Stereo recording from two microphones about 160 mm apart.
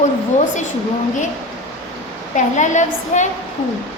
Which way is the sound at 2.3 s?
50° left (ahead or behind).